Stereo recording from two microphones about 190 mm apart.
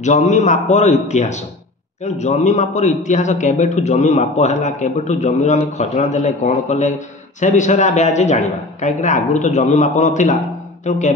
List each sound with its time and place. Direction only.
0.0 s a man's voice: 40° left (ahead or behind)